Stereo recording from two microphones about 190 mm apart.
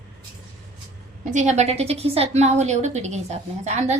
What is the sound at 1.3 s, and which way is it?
A woman's voice, 35° right (ahead or behind).